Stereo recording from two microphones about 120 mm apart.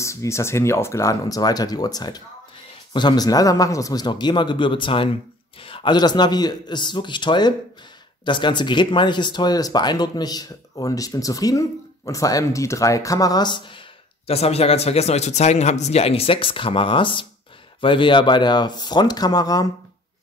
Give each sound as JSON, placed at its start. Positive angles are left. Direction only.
{"t": 0.0, "sound": "speech", "side_deg": 25}
{"t": 14.2, "sound": "speech", "side_deg": 60}